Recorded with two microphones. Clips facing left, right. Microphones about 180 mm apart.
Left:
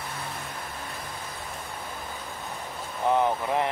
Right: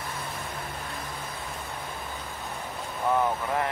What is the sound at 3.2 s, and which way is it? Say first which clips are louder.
Speech: left 2 dB; 20° left (ahead or behind).